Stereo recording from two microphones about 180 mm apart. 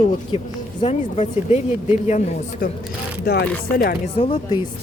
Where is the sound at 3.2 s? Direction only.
60° left (ahead or behind).